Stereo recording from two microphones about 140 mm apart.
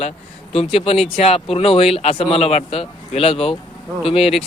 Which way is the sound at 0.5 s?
45° left (ahead or behind).